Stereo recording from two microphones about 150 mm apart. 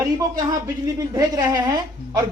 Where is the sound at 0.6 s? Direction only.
25° right (ahead or behind).